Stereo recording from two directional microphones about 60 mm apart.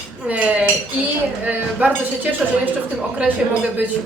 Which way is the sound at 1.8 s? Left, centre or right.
Right.